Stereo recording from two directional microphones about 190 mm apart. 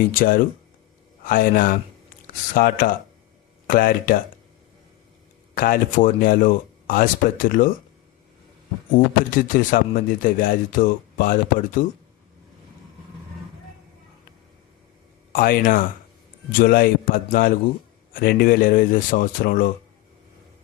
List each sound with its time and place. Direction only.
0.0 s speech: 45° left (ahead or behind)
5.5 s speech: 50° left (ahead or behind)
9.3 s speech: 45° left (ahead or behind)
15.3 s speech: 50° left (ahead or behind)